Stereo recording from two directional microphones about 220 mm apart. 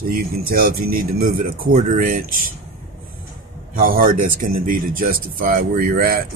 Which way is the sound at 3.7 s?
40° right (ahead or behind).